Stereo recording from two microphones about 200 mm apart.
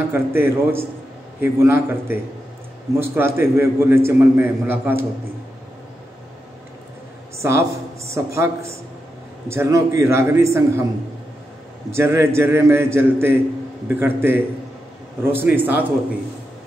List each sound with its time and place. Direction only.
0.1 s a man's voice: 10° right (ahead or behind)
7.3 s a man's voice: 15° right (ahead or behind)
11.9 s a man's voice: 10° right (ahead or behind)